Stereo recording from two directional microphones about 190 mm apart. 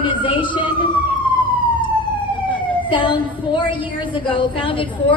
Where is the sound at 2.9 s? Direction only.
25° left (ahead or behind).